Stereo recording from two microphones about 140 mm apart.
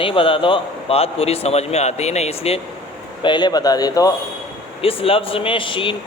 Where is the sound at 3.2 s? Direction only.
30° left (ahead or behind).